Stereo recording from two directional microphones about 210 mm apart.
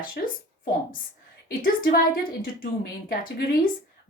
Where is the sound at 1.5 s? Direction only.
45° left (ahead or behind).